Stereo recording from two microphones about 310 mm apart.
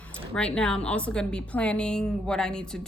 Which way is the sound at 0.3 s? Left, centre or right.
Centre.